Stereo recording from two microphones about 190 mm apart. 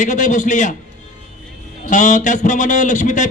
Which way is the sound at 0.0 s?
40° left (ahead or behind).